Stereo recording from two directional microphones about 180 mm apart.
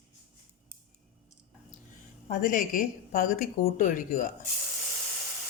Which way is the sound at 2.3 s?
50° left (ahead or behind).